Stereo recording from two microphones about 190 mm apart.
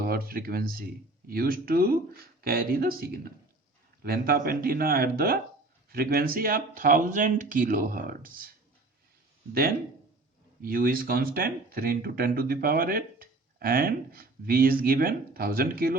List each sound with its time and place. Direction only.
0.0 s speech: 50° right (ahead or behind)
10.6 s speech: 50° right (ahead or behind)